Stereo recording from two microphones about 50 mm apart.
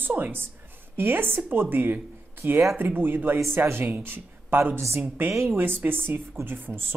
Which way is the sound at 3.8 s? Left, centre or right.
Right.